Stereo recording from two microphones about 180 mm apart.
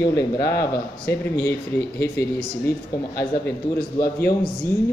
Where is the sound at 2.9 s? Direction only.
20° left (ahead or behind).